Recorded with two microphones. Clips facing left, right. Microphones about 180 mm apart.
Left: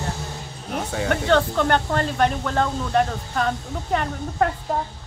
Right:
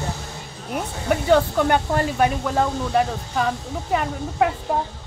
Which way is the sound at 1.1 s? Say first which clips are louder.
Right 3 dB; 10° right (ahead or behind).